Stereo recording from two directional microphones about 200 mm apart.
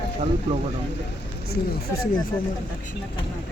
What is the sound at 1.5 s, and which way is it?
Speech, 50° left (ahead or behind).